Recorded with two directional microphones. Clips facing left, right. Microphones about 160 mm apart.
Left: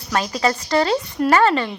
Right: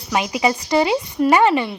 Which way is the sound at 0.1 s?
15° right (ahead or behind).